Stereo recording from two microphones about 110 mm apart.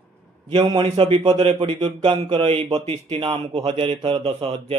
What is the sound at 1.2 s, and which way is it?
A man's voice, 45° right (ahead or behind).